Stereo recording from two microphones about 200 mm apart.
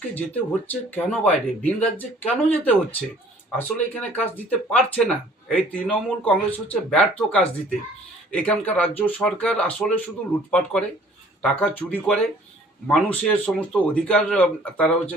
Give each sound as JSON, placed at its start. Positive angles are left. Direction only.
{"t": 0.1, "sound": "speech", "side_deg": 10}